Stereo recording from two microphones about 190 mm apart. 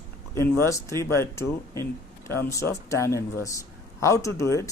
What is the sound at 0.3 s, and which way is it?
Speech, 15° left (ahead or behind).